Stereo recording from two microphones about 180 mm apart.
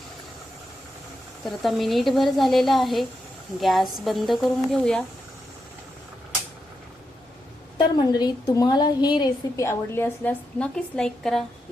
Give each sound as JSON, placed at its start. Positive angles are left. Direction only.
{"t": 1.5, "sound": "a woman's voice", "side_deg": 0}
{"t": 7.8, "sound": "a woman's voice", "side_deg": 25}
{"t": 9.6, "sound": "a woman's voice", "side_deg": 10}